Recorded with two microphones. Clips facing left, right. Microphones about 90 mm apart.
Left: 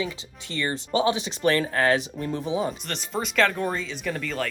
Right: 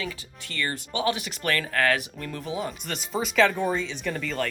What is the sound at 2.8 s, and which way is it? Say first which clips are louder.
Speech: even; centre (ahead or behind).